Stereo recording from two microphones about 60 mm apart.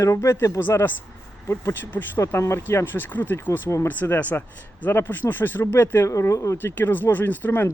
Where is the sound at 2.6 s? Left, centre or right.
Left.